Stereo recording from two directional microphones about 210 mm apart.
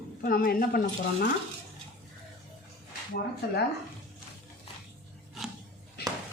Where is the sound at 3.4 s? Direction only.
50° left (ahead or behind).